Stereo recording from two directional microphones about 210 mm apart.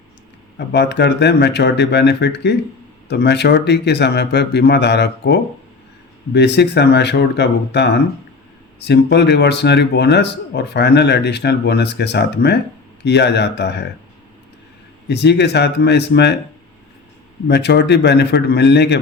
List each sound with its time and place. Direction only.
0.7 s speech: 55° left (ahead or behind)
15.0 s speech: 55° left (ahead or behind)
17.5 s speech: 55° left (ahead or behind)